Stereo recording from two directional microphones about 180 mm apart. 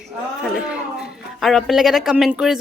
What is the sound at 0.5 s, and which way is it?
Speech, 5° right (ahead or behind).